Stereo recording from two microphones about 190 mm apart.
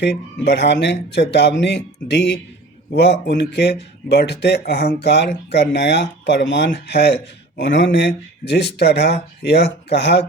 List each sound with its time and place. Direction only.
0.4 s speech: 60° left (ahead or behind)